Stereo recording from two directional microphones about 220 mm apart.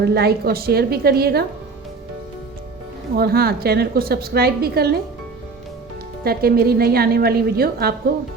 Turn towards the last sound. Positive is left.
turn(degrees=-45)  # may be behind; listen again after turning